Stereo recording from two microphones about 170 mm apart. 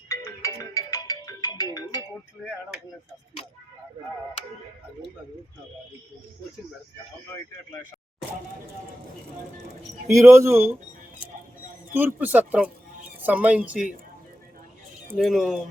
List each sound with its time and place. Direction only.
0.1 s music: 20° left (ahead or behind)
2.4 s speech: 5° right (ahead or behind)
10.1 s speech: 15° right (ahead or behind)
11.9 s speech: 10° right (ahead or behind)
15.1 s speech: centre (ahead or behind)